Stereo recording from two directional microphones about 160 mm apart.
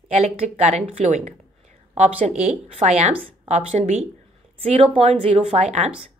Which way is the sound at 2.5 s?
45° right (ahead or behind).